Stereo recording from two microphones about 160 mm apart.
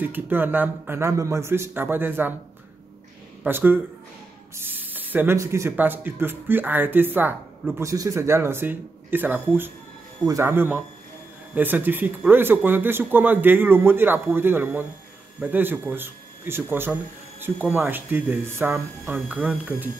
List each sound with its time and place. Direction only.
0.0 s speech: 10° right (ahead or behind)
3.4 s speech: 15° right (ahead or behind)